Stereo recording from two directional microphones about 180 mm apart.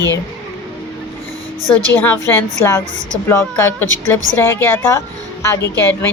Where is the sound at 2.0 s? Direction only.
10° left (ahead or behind).